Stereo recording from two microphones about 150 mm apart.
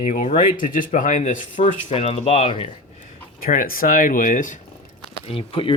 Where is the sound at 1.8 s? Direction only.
40° left (ahead or behind).